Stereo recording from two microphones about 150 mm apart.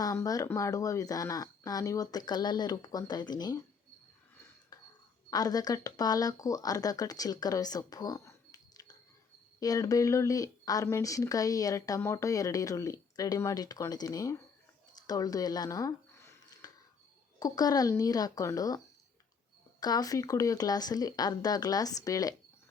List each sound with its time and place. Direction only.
0.0 s speech: 25° left (ahead or behind)
4.7 s a sound: 25° left (ahead or behind)
5.3 s speech: 25° left (ahead or behind)
15.0 s a sound: 25° left (ahead or behind)
17.4 s speech: 25° left (ahead or behind)
19.8 s speech: 25° left (ahead or behind)